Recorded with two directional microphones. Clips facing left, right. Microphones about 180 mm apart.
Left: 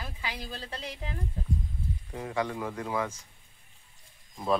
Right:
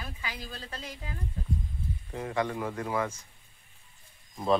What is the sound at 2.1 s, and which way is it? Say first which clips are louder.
Speech: right 1 dB; 10° left (ahead or behind).